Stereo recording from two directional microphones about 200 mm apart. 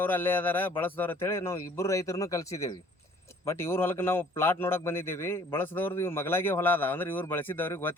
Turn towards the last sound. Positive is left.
turn(degrees=10)  # may be behind; listen again after turning